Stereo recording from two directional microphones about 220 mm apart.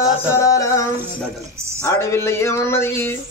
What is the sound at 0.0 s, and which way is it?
Music, 15° left (ahead or behind).